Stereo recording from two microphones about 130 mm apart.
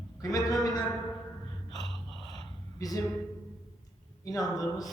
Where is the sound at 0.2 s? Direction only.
25° left (ahead or behind).